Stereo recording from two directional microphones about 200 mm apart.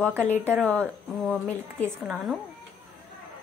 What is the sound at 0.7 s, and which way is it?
Speech, 5° left (ahead or behind).